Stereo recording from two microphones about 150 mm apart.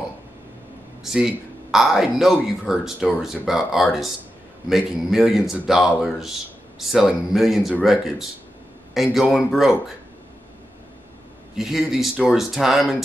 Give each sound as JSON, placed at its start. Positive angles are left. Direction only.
{"t": 1.0, "sound": "speech", "side_deg": -5}
{"t": 11.5, "sound": "speech", "side_deg": 0}